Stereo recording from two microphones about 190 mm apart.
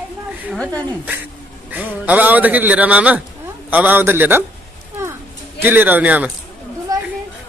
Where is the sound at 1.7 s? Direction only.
10° right (ahead or behind).